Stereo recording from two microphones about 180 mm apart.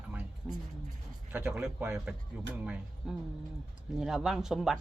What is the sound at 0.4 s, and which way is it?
Speech, centre (ahead or behind).